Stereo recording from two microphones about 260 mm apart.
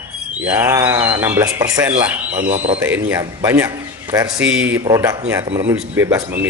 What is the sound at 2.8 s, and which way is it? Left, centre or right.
A man's voice, centre.